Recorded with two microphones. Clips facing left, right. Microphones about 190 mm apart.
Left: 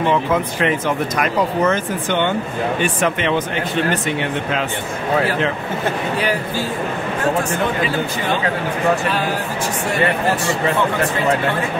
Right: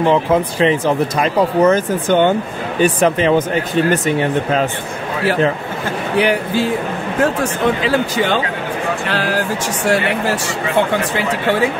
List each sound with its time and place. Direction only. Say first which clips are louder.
0.1 s speech: right 4 dB; 30° right (ahead or behind)
6.1 s speech: right 5 dB; 70° right (ahead or behind)
7.8 s speech: right 4 dB; 90° right